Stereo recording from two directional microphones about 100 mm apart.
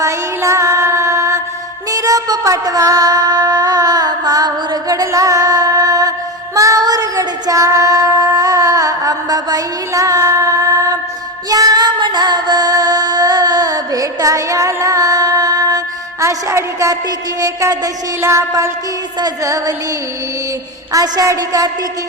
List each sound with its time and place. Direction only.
0.0 s music: 30° right (ahead or behind)
16.2 s a sound: 30° right (ahead or behind)
19.2 s a woman's voice: 35° right (ahead or behind)
20.9 s a woman's voice: 35° right (ahead or behind)